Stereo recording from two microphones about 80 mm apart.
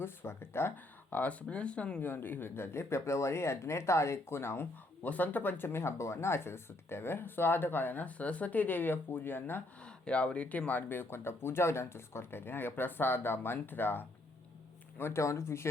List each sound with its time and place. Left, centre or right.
0.0 s speech: left
1.1 s speech: centre
9.8 s speech: centre; by 15.7 s left